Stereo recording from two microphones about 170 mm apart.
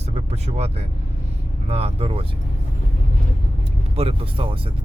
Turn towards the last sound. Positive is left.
turn(degrees=-30)  # may be behind; listen again after turning